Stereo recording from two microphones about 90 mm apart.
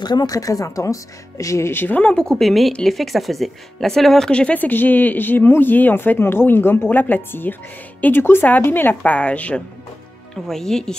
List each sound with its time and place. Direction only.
0.0 s speech: 50° left (ahead or behind)
1.7 s speech: 20° left (ahead or behind); by 11.0 s 5° left (ahead or behind)